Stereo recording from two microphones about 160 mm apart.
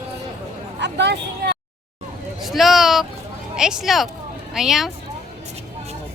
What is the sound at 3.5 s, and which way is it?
Speech, 5° right (ahead or behind).